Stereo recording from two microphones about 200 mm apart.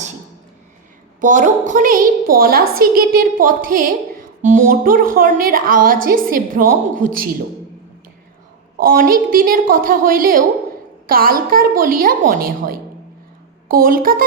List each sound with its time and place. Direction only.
1.2 s a woman's voice: 40° right (ahead or behind)
8.8 s a woman's voice: 45° right (ahead or behind)